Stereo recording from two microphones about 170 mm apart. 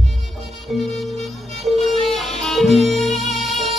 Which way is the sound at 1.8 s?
Centre (ahead or behind).